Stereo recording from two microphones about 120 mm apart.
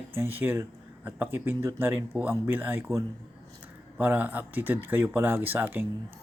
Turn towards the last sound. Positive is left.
turn(degrees=-15)  # may be behind; listen again after turning